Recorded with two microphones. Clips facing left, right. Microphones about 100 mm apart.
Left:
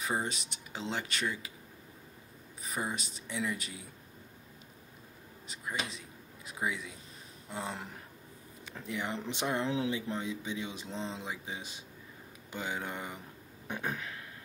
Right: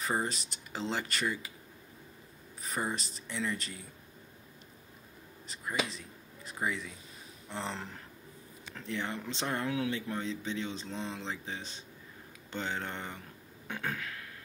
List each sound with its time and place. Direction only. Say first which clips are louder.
0.0 s speech: right 1 dB; centre (ahead or behind)
2.6 s speech: right 1 dB; centre (ahead or behind)
5.5 s speech: right 3 dB; centre (ahead or behind)
13.7 s a sound: even; 15° left (ahead or behind)